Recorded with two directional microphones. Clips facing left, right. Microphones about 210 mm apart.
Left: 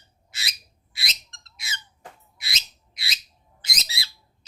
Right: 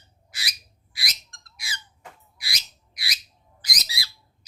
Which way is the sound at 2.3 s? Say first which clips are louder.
Left 1 dB; 25° left (ahead or behind).